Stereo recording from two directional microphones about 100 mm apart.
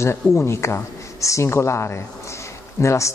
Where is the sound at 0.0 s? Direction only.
25° left (ahead or behind).